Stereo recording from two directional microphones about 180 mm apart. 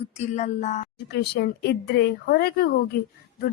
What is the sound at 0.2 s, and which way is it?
Speech, 40° left (ahead or behind).